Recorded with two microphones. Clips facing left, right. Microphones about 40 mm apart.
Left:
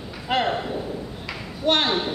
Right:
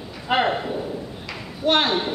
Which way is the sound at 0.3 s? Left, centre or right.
Centre.